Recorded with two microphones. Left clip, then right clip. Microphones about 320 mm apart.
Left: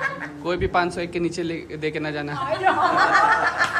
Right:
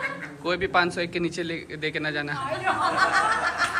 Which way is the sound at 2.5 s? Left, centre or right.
Left.